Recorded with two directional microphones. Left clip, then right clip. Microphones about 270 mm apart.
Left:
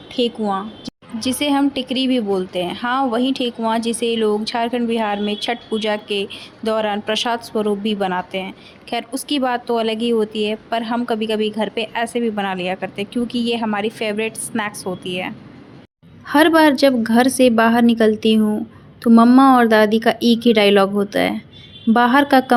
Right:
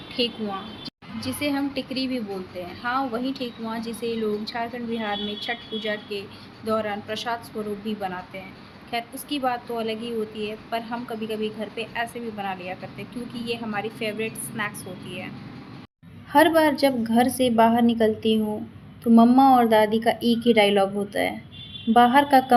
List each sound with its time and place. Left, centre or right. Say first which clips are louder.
0.2 s speech: left 7 dB; left
1.2 s a woman's voice: left 9 dB; left
16.3 s speech: left 5 dB; left